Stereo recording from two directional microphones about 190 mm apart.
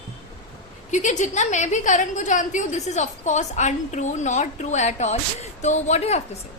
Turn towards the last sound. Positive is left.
turn(degrees=35)  # may be behind; listen again after turning